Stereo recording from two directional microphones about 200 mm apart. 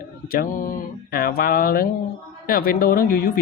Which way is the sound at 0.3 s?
45° left (ahead or behind).